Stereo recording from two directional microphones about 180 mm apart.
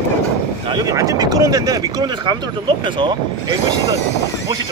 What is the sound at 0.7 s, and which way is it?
Speech, 20° right (ahead or behind).